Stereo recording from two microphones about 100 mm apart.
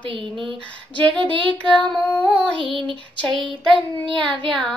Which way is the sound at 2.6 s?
55° right (ahead or behind).